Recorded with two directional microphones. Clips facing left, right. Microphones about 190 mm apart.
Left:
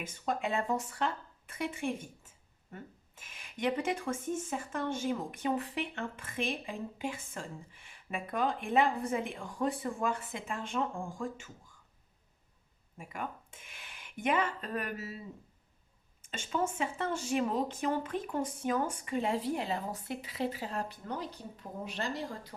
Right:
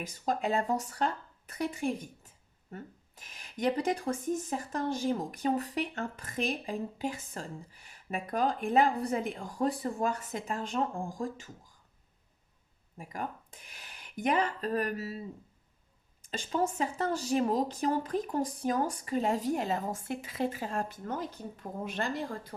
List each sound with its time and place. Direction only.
0.0 s speech: 35° right (ahead or behind)
13.0 s speech: 35° right (ahead or behind)
16.2 s speech: 35° right (ahead or behind); by 22.5 s 50° right (ahead or behind)